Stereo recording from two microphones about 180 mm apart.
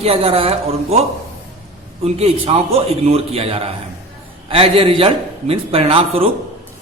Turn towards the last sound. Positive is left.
turn(degrees=-35)  # may be behind; listen again after turning